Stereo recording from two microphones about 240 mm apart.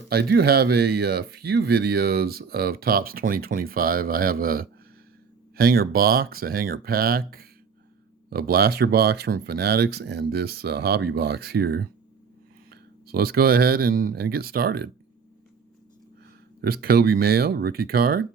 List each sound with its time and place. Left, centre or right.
0.1 s speech: right
16.6 s speech: right